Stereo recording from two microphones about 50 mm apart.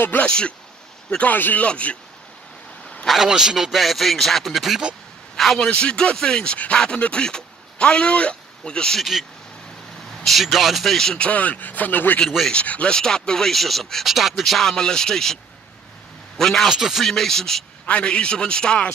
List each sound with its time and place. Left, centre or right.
0.1 s speech: left
1.1 s a man's voice: left
3.1 s a man's voice: centre
5.3 s a sound: centre
5.6 s speech: centre
10.2 s a man's voice: centre
11.1 s speech: left
12.6 s a man's voice: left
12.9 s speech: centre
14.0 s a man's voice: centre
16.3 s a man's voice: centre
16.6 s a man's voice: centre
17.0 s speech: centre
17.8 s a man's voice: left